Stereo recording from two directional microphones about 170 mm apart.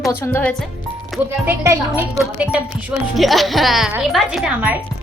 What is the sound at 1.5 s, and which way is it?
Speech, 15° right (ahead or behind).